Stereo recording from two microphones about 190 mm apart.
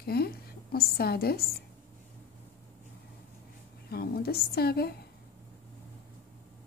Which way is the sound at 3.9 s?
55° left (ahead or behind).